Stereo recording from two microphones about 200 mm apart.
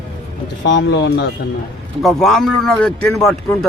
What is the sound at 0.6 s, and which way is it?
Speech, 60° left (ahead or behind).